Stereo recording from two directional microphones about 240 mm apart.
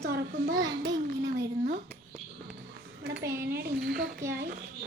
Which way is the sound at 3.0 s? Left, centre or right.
Right.